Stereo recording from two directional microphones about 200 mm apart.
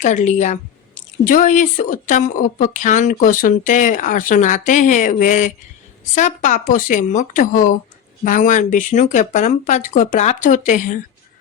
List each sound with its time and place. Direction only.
0.0 s speech: 40° left (ahead or behind)